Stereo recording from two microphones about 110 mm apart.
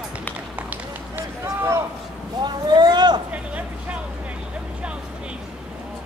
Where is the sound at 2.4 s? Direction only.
40° right (ahead or behind).